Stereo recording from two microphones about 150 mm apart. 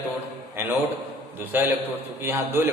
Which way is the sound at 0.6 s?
15° right (ahead or behind).